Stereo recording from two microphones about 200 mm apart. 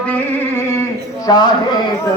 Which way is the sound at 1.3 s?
20° left (ahead or behind).